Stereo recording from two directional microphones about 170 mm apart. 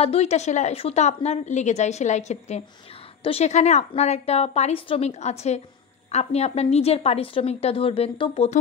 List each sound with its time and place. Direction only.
0.0 s a woman's voice: 40° left (ahead or behind)